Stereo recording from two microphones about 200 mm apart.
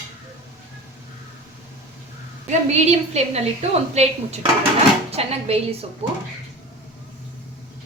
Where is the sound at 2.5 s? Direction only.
35° right (ahead or behind).